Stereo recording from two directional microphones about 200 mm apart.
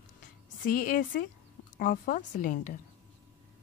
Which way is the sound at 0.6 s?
45° left (ahead or behind).